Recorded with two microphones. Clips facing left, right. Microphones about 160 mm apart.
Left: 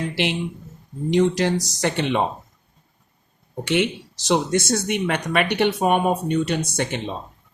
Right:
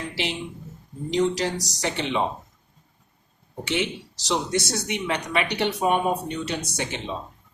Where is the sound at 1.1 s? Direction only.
60° left (ahead or behind).